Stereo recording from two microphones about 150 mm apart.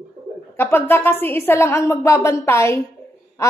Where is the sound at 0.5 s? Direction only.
15° left (ahead or behind).